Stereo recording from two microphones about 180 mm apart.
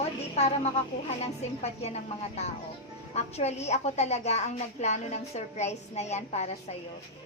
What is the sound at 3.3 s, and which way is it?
A woman's voice, 35° left (ahead or behind).